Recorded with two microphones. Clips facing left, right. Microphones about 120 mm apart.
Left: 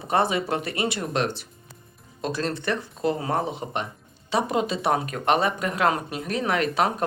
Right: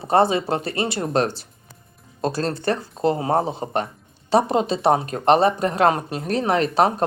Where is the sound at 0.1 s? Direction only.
30° right (ahead or behind).